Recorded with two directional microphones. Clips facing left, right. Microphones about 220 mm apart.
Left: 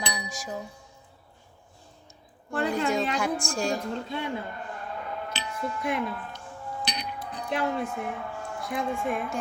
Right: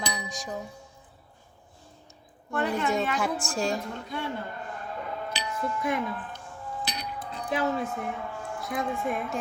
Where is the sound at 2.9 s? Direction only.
5° right (ahead or behind).